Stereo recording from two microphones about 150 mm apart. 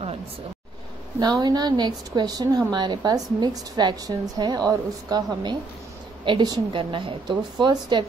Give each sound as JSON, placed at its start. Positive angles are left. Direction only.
{"t": 1.2, "sound": "a woman's voice", "side_deg": -30}